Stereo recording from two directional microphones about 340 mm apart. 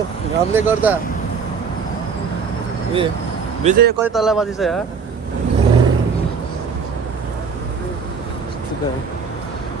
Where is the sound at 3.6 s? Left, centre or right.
Right.